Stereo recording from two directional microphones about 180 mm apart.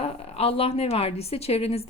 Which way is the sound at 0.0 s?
35° left (ahead or behind).